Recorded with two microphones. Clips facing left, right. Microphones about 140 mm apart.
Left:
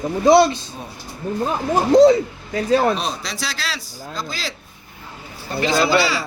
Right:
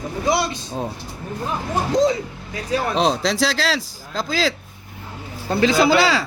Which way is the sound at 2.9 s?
90° right.